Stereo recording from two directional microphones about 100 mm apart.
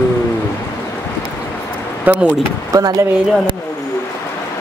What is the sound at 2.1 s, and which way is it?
Speech, 15° right (ahead or behind).